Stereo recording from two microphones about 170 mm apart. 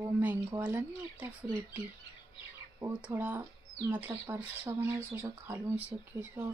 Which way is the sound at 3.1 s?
10° right (ahead or behind).